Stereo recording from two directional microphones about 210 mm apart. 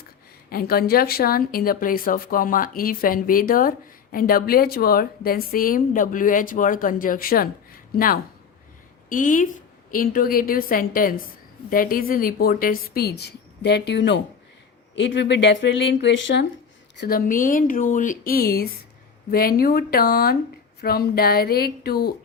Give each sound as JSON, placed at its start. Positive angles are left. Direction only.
{"t": 0.5, "sound": "a woman's voice", "side_deg": 45}
{"t": 17.0, "sound": "speech", "side_deg": 45}